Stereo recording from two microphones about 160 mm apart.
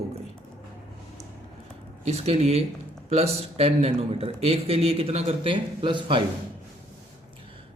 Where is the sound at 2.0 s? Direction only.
40° right (ahead or behind).